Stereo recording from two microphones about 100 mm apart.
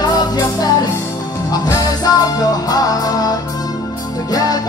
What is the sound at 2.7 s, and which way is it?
Music, 40° left (ahead or behind).